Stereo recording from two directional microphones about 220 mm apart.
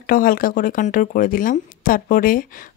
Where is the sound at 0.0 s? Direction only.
40° left (ahead or behind).